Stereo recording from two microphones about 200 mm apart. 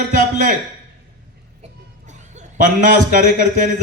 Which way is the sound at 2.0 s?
40° right (ahead or behind).